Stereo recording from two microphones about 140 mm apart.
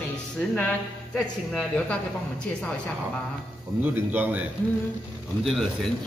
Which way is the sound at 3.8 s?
15° right (ahead or behind).